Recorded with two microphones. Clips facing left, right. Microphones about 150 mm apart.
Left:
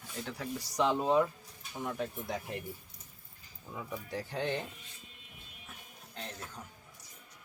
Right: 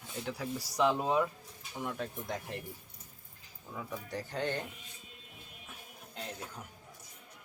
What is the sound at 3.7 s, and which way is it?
Speech, 5° left (ahead or behind).